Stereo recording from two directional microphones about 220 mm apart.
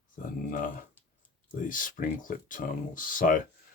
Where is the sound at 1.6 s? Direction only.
35° left (ahead or behind).